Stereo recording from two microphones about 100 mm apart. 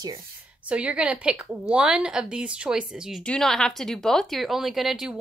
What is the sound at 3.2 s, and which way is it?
A woman's voice, 5° left (ahead or behind).